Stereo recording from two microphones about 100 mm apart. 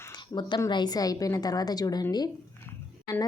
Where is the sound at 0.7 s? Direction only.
45° left (ahead or behind).